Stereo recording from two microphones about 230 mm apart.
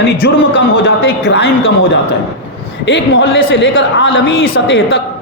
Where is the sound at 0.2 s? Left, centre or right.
Left.